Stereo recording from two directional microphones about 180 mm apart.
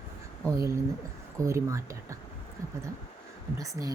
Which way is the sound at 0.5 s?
15° right (ahead or behind).